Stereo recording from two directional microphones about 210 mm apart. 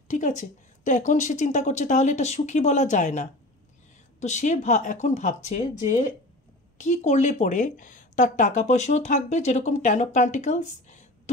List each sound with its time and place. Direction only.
0.1 s speech: 35° left (ahead or behind)